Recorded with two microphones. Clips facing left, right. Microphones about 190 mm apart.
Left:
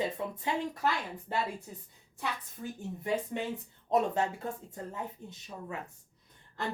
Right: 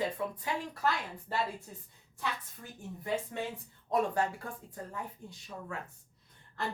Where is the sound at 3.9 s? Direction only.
25° left (ahead or behind).